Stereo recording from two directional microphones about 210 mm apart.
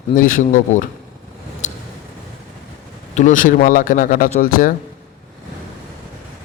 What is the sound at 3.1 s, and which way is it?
A man's voice, 35° left (ahead or behind).